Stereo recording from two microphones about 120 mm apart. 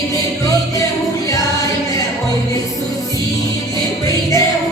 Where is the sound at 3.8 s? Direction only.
30° left (ahead or behind).